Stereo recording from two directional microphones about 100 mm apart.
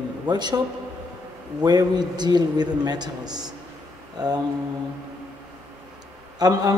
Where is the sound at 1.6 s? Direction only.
40° right (ahead or behind).